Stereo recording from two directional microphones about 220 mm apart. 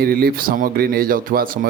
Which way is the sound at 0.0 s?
45° right (ahead or behind).